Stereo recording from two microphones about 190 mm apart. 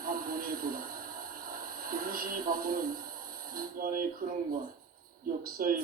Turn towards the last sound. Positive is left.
turn(degrees=-50)  # may be behind; listen again after turning